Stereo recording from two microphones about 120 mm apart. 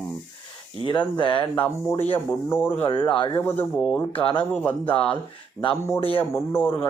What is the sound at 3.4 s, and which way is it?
Speech, 15° left (ahead or behind).